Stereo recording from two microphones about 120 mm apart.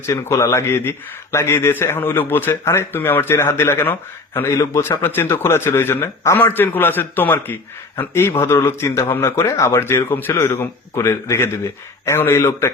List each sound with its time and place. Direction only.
0.0 s a man's voice: 25° left (ahead or behind)